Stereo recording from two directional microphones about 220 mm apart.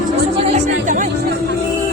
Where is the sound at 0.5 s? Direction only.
35° right (ahead or behind).